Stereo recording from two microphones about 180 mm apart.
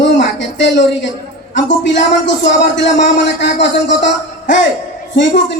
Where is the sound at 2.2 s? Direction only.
85° left.